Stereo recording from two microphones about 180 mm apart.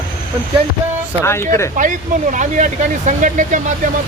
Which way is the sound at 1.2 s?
15° left (ahead or behind).